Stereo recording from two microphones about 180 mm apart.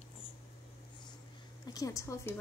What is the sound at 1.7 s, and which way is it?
Speech, 20° left (ahead or behind).